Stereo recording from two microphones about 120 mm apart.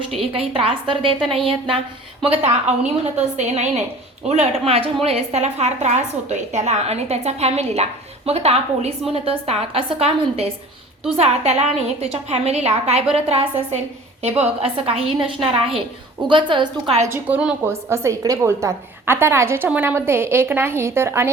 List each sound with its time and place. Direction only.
0.2 s a woman's voice: 50° right (ahead or behind)
2.2 s a woman's voice: 60° right (ahead or behind)
4.3 s a woman's voice: 60° right (ahead or behind); by 16.9 s 45° right (ahead or behind)
17.1 s a woman's voice: 10° right (ahead or behind)